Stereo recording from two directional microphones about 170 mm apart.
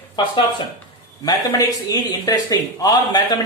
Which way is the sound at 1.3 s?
20° left (ahead or behind).